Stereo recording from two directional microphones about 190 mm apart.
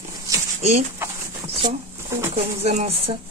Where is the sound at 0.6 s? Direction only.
35° right (ahead or behind).